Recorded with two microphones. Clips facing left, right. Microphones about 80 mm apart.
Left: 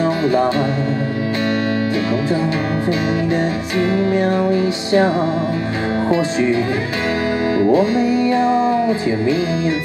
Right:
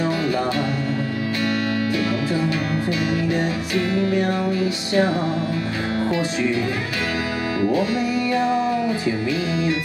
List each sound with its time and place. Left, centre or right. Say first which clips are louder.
0.0 s music: left 6 dB; left
3.7 s music: left 4 dB; left